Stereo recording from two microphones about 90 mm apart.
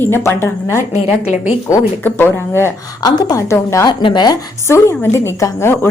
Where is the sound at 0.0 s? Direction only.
25° left (ahead or behind).